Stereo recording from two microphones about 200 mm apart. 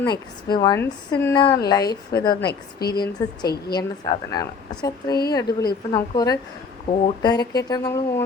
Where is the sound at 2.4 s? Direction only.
50° left (ahead or behind).